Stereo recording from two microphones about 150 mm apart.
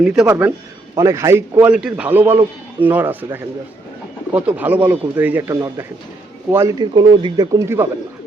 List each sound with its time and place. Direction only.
0.0 s speech: 10° right (ahead or behind)
4.4 s speech: 10° right (ahead or behind)